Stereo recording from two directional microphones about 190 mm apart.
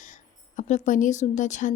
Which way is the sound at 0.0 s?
40° left (ahead or behind).